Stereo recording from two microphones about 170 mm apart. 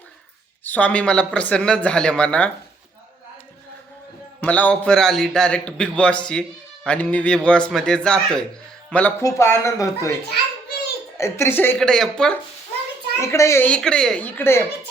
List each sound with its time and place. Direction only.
0.6 s speech: 10° left (ahead or behind)
4.4 s a man's voice: 10° left (ahead or behind)
11.2 s a man's voice: 15° left (ahead or behind)
13.1 s speech: 15° left (ahead or behind)